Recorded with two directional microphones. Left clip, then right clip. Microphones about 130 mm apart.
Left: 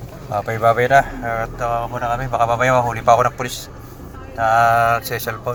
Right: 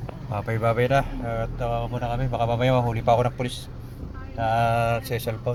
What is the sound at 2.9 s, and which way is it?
Speech, 55° right (ahead or behind).